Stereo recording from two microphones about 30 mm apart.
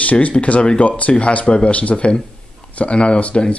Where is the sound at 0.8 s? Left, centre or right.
Left.